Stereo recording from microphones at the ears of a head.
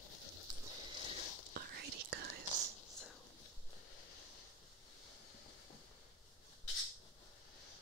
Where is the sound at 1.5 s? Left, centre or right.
Right.